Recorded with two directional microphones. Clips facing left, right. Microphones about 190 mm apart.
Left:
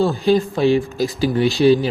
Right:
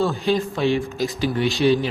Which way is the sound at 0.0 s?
35° left (ahead or behind).